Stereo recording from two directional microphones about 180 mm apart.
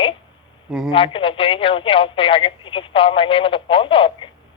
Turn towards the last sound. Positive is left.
turn(degrees=30)  # may be behind; listen again after turning